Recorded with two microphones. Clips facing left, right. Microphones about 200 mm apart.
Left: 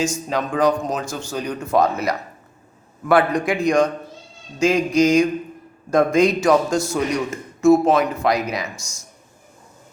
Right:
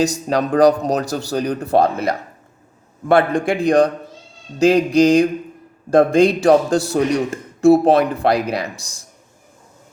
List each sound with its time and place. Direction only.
0.0 s a man's voice: 35° right (ahead or behind)